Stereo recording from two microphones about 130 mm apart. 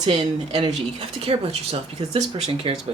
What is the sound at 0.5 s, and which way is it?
Speech, 40° right (ahead or behind).